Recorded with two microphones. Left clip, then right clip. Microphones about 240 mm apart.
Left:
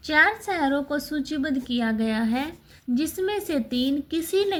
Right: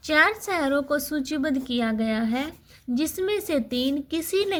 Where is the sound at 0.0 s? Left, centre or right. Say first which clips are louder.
Left 1 dB; right.